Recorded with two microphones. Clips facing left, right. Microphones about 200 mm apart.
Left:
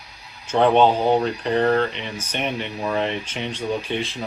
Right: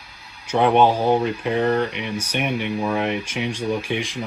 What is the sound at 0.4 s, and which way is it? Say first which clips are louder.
Speech: even; 15° right (ahead or behind).